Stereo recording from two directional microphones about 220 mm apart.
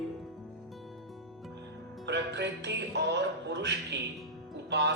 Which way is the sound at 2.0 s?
50° right (ahead or behind).